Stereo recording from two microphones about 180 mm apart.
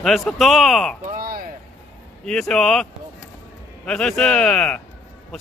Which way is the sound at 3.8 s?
5° left (ahead or behind).